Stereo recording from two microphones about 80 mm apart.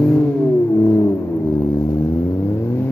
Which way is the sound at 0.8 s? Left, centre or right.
Left.